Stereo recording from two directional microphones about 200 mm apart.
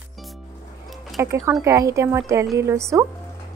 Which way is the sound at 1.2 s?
10° right (ahead or behind).